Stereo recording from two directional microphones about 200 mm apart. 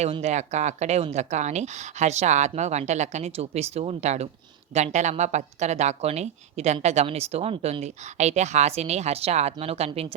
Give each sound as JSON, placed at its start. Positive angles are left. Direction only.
{"t": 0.0, "sound": "a woman's voice", "side_deg": -35}